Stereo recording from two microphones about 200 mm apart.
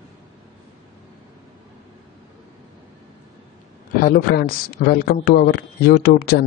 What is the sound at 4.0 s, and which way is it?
A man's voice, 50° left (ahead or behind).